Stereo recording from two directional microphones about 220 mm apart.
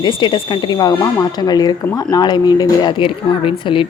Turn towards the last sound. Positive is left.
turn(degrees=20)  # may be behind; listen again after turning